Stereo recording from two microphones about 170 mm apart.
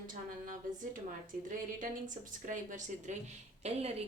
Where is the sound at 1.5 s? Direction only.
50° right (ahead or behind).